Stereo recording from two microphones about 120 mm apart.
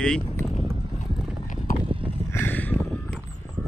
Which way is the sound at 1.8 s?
50° right (ahead or behind).